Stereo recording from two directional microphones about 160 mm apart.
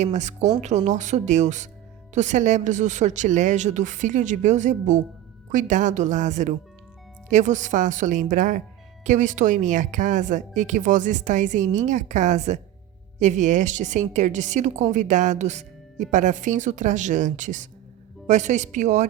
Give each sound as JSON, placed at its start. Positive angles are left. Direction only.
{"t": 0.0, "sound": "a woman's voice", "side_deg": -45}